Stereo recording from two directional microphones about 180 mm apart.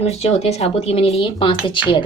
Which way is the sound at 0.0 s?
35° left (ahead or behind).